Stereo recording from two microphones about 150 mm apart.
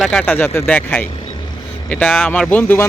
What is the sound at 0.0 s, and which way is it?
Speech, 5° left (ahead or behind).